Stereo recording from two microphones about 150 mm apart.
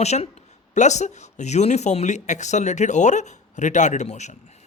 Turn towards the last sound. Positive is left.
turn(degrees=50)  # may be behind; listen again after turning